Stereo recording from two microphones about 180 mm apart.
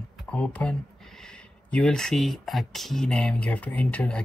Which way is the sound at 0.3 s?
5° left (ahead or behind).